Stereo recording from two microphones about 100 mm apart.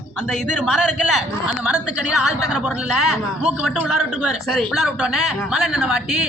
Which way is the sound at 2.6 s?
10° right (ahead or behind).